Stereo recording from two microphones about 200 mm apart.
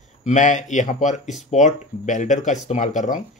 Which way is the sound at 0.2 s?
35° left (ahead or behind).